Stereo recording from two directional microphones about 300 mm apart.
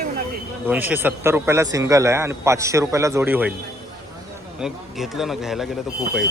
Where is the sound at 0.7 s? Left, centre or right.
Centre.